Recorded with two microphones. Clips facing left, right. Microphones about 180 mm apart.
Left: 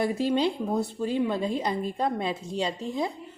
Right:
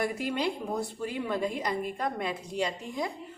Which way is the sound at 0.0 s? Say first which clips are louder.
Left 5 dB; 25° left (ahead or behind).